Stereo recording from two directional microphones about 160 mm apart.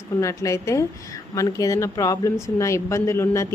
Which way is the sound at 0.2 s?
20° left (ahead or behind).